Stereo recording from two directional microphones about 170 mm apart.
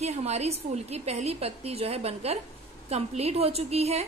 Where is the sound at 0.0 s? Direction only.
40° right (ahead or behind).